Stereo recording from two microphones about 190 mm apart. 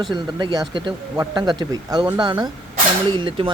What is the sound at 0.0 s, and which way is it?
A man's voice, 25° right (ahead or behind).